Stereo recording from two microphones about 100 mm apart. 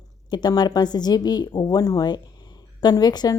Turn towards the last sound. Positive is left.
turn(degrees=45)  # may be behind; listen again after turning